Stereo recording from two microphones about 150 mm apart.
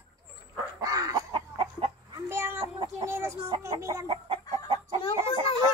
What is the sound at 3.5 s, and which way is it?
Music, 20° right (ahead or behind).